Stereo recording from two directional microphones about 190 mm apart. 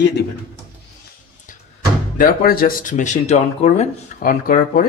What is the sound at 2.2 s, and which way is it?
Speech, 50° left (ahead or behind).